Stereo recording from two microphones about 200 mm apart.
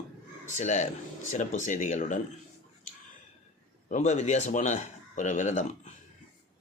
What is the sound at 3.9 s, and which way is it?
Speech, 35° left (ahead or behind).